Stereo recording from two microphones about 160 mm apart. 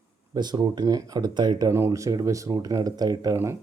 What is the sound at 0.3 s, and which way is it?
Speech, 25° right (ahead or behind).